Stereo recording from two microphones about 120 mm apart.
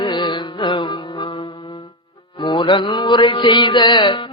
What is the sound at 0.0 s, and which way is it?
Music, 40° left (ahead or behind).